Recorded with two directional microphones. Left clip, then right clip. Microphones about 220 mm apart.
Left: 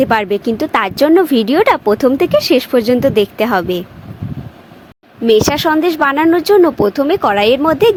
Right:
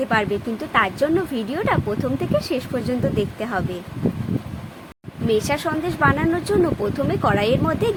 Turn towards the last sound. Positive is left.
turn(degrees=35)  # may be behind; listen again after turning